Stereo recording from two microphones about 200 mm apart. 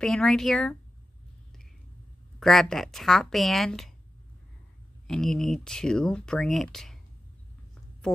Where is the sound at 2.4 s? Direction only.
Centre (ahead or behind).